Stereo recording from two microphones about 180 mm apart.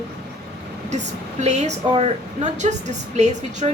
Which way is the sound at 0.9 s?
40° right (ahead or behind).